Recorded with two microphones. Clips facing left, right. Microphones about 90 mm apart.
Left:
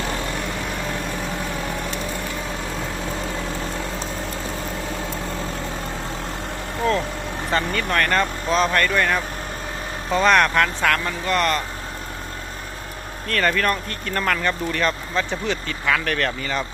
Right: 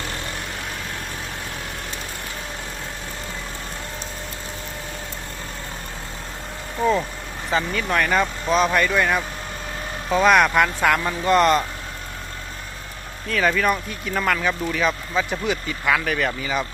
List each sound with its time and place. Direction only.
7.5 s speech: 5° right (ahead or behind); by 11.6 s 20° right (ahead or behind)
13.2 s speech: 5° right (ahead or behind)